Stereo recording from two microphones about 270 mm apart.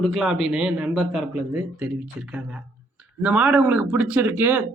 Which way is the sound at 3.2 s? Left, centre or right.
Centre.